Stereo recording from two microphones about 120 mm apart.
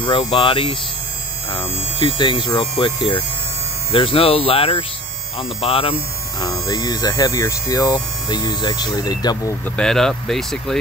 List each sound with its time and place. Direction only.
0.0 s speech: 45° left (ahead or behind)
2.0 s speech: 45° left (ahead or behind)
6.4 s hum: 35° left (ahead or behind)
9.8 s speech: 5° left (ahead or behind)